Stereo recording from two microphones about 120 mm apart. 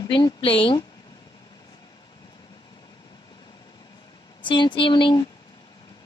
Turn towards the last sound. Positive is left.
turn(degrees=40)  # may be behind; listen again after turning